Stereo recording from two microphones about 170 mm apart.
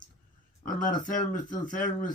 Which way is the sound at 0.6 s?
55° left (ahead or behind).